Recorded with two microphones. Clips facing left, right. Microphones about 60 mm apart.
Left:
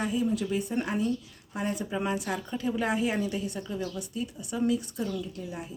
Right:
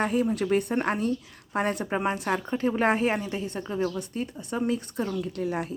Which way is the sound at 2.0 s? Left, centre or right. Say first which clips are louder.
Right 4 dB; right.